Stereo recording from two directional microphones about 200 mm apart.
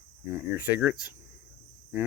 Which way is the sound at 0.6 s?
10° right (ahead or behind).